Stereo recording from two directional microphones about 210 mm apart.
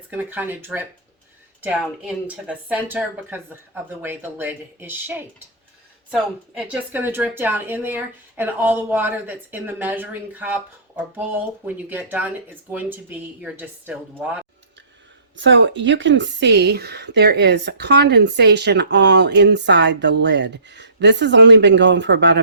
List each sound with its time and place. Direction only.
0.1 s speech: 10° right (ahead or behind)
15.4 s speech: 60° right (ahead or behind)